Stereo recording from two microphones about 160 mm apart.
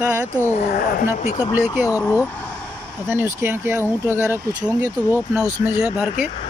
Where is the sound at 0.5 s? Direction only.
60° left (ahead or behind).